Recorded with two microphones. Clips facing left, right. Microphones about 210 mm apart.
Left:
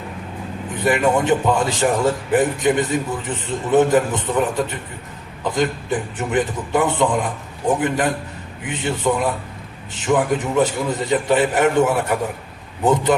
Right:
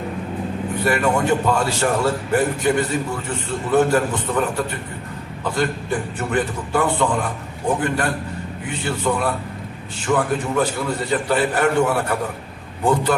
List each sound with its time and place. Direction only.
0.9 s a man's voice: 20° left (ahead or behind)